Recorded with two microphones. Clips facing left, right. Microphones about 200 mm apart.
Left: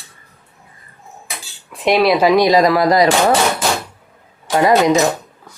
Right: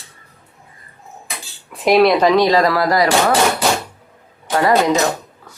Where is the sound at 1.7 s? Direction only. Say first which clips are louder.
Right 1 dB; centre (ahead or behind); by 3.1 s 20° left (ahead or behind).